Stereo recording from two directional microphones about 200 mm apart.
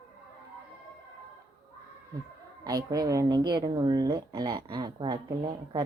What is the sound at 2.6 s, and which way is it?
Speech, 20° right (ahead or behind).